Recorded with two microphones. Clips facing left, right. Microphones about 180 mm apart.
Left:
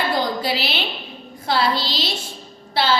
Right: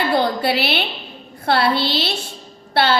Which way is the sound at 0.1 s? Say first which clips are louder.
Right 4 dB; 60° right (ahead or behind).